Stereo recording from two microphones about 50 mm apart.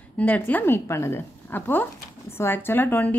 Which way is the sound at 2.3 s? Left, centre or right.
Left.